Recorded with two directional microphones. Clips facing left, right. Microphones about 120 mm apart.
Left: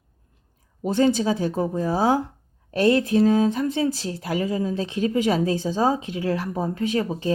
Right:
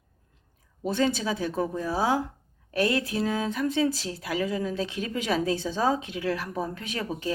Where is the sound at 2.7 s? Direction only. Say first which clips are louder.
Left 6 dB; 25° left (ahead or behind).